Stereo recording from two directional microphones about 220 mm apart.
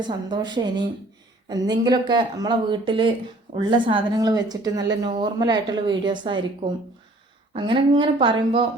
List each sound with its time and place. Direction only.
0.0 s speech: 20° right (ahead or behind)